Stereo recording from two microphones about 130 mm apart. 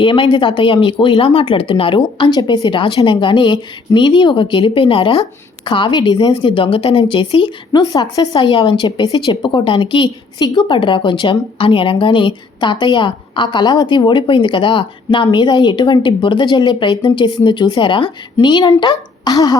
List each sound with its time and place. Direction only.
0.0 s a woman's voice: 40° left (ahead or behind)
8.4 s a woman's voice: 40° left (ahead or behind)